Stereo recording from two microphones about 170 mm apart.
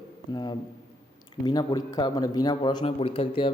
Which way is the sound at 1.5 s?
25° left (ahead or behind).